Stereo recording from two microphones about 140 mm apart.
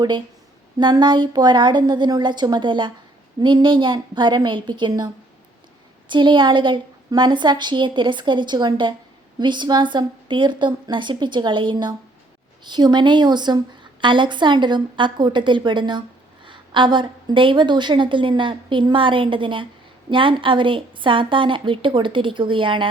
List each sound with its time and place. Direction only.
0.8 s a woman's voice: 35° right (ahead or behind)
6.1 s a woman's voice: 35° right (ahead or behind)